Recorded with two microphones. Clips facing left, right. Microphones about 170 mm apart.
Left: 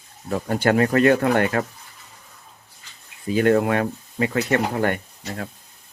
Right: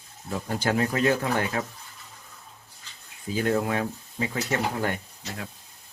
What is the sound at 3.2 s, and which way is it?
Speech, 70° left (ahead or behind).